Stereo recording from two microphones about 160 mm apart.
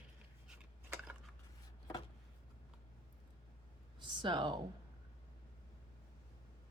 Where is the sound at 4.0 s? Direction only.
30° right (ahead or behind).